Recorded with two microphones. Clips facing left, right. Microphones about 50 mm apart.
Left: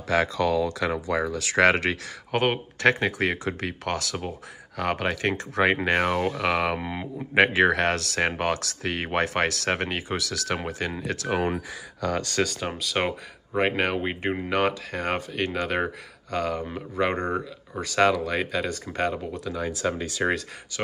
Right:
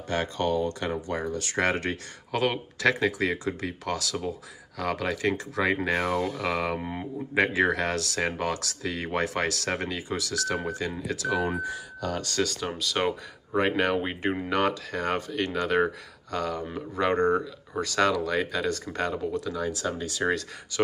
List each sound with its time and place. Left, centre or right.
0.7 s speech: left
2.3 s speech: left
12.4 s speech: left
12.8 s speech: centre
19.6 s speech: left
20.7 s speech: centre